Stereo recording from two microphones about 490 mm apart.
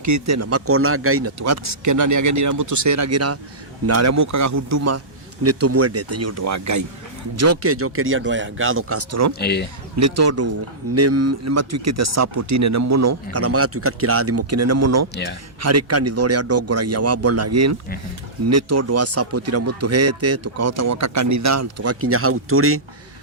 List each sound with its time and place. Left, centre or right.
0.0 s speech: right
9.4 s speech: centre
9.9 s speech: right
15.1 s speech: left
15.6 s speech: right